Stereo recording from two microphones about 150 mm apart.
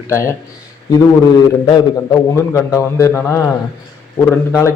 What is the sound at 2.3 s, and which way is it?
A man's voice, 20° left (ahead or behind).